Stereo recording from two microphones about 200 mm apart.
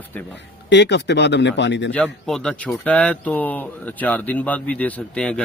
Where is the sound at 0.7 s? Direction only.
60° left (ahead or behind).